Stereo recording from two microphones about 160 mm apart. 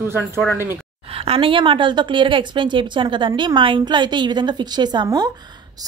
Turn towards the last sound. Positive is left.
turn(degrees=-25)  # may be behind; listen again after turning